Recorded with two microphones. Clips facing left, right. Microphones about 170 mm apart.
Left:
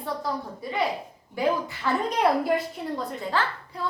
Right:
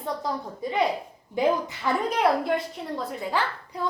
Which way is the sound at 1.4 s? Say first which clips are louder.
Right 2 dB; 20° right (ahead or behind).